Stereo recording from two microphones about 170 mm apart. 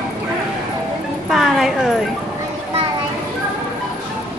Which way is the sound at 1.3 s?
Centre (ahead or behind).